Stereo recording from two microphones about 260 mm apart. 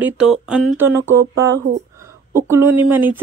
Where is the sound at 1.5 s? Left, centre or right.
Right.